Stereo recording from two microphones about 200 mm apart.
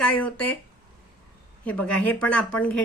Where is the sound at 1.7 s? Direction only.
5° left (ahead or behind).